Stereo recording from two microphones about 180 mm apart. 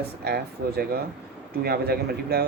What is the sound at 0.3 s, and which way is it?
A man's voice, 60° right (ahead or behind).